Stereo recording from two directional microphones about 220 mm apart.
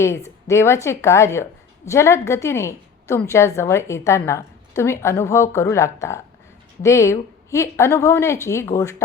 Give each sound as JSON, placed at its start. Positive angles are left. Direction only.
{"t": 0.0, "sound": "a woman's voice", "side_deg": 15}